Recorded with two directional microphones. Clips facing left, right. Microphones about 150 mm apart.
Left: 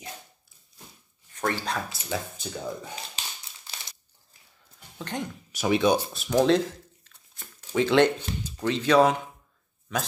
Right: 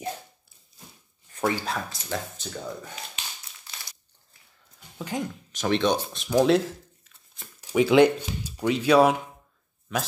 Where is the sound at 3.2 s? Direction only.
35° left (ahead or behind).